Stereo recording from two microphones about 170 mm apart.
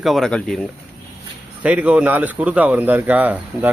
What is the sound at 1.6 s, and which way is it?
Speech, 10° right (ahead or behind).